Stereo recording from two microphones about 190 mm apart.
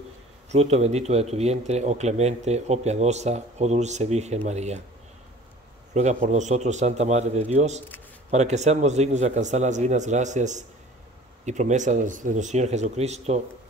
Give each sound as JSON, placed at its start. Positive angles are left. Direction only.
{"t": 0.5, "sound": "speech", "side_deg": -35}
{"t": 5.9, "sound": "speech", "side_deg": -40}